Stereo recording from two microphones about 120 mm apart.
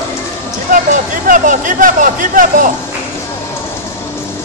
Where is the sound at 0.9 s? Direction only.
90° right.